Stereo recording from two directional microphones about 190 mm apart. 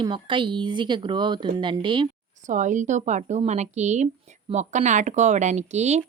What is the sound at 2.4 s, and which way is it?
Speech, 40° right (ahead or behind).